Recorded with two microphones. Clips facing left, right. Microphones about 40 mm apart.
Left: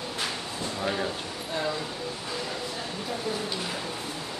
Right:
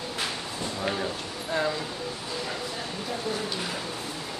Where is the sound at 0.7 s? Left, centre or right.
Centre.